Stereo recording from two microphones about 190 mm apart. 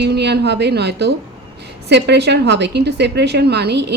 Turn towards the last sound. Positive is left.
turn(degrees=-60)  # may be behind; listen again after turning